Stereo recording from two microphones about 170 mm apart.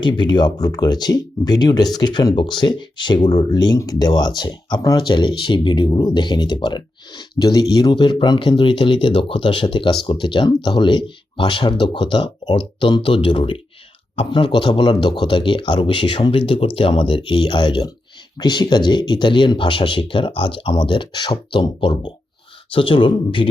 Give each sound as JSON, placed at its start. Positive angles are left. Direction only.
{"t": 0.0, "sound": "speech", "side_deg": 30}